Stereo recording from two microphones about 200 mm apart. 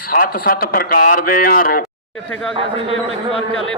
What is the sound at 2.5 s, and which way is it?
Speech, 25° right (ahead or behind).